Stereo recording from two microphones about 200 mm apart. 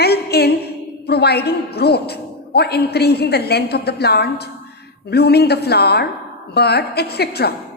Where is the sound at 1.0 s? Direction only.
55° left (ahead or behind).